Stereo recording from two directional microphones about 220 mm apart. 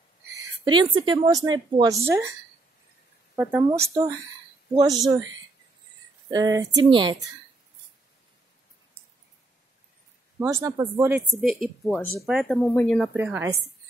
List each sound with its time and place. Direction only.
0.3 s speech: 20° right (ahead or behind)
3.3 s speech: 10° right (ahead or behind)
6.3 s speech: 15° right (ahead or behind)
10.4 s speech: 15° right (ahead or behind)
11.4 s a woman's voice: centre (ahead or behind)